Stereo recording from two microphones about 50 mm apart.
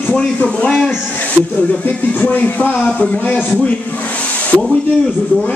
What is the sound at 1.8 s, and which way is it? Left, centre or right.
Speech, left.